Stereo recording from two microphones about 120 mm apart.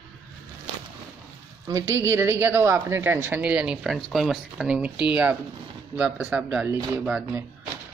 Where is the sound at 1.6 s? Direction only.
30° right (ahead or behind).